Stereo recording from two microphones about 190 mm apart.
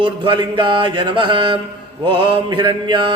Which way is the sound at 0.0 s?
25° right (ahead or behind).